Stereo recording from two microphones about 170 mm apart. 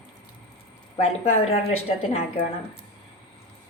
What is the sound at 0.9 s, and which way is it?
A woman's voice, 40° left (ahead or behind).